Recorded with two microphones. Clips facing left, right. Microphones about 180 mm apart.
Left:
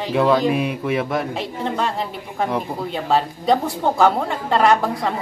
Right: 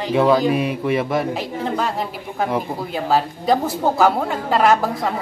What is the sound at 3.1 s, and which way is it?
Speech, centre (ahead or behind).